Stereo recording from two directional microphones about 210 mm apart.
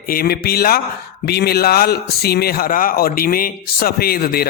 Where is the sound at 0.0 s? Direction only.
45° left (ahead or behind).